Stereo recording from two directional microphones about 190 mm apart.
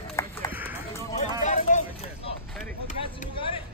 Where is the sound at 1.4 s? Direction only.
40° left (ahead or behind).